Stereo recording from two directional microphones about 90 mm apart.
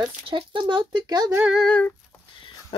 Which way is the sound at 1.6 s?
10° left (ahead or behind).